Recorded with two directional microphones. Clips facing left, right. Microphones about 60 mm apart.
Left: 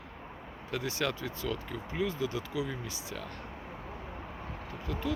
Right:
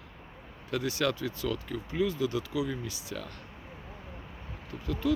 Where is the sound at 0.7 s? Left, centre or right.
Left.